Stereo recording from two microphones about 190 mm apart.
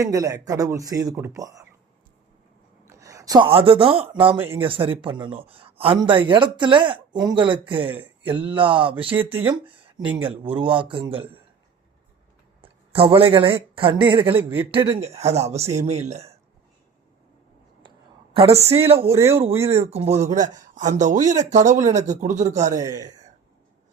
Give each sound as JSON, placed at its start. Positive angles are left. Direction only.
{"t": 0.0, "sound": "speech", "side_deg": -15}
{"t": 2.8, "sound": "speech", "side_deg": -15}
{"t": 4.4, "sound": "speech", "side_deg": -10}
{"t": 4.6, "sound": "speech", "side_deg": -30}
{"t": 7.9, "sound": "speech", "side_deg": -10}
{"t": 8.2, "sound": "speech", "side_deg": -30}
{"t": 12.6, "sound": "a man's voice", "side_deg": -30}
{"t": 14.3, "sound": "speech", "side_deg": -10}
{"t": 15.2, "sound": "speech", "side_deg": -35}
{"t": 18.3, "sound": "speech", "side_deg": -30}
{"t": 19.1, "sound": "speech", "side_deg": -15}
{"t": 19.6, "sound": "speech", "side_deg": -30}
{"t": 22.7, "sound": "speech", "side_deg": -20}